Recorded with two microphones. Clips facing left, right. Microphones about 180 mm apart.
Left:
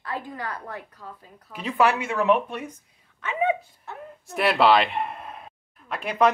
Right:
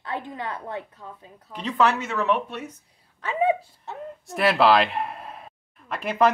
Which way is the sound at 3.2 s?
35° right (ahead or behind).